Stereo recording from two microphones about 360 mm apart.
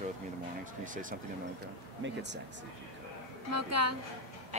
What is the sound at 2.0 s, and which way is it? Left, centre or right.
Speech, right.